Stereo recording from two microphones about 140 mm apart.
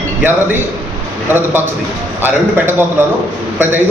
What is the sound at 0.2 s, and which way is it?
Speech, 15° right (ahead or behind).